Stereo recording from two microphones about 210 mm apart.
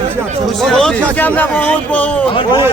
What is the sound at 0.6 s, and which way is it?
A man's voice, 5° left (ahead or behind).